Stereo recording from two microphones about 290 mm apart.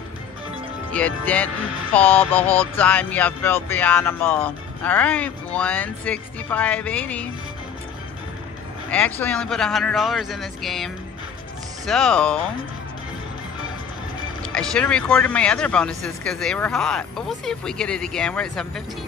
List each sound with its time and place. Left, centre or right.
0.9 s speech: centre
8.9 s speech: centre
14.4 s speech: centre